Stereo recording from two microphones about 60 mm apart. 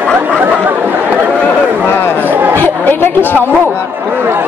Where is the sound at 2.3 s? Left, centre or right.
Right.